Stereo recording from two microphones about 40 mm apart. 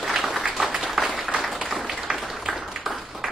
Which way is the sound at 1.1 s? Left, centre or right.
Centre.